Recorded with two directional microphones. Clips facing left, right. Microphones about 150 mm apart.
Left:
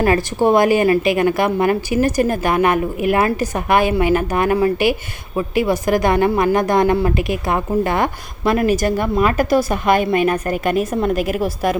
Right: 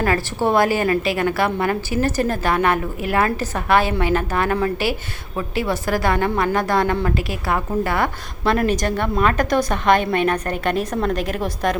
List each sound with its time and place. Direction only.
0.0 s a woman's voice: 15° left (ahead or behind)
8.6 s a woman's voice: 10° left (ahead or behind)